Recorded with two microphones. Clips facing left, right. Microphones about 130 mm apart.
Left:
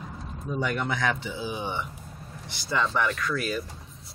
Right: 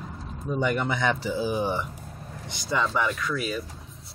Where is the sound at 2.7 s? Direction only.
5° right (ahead or behind).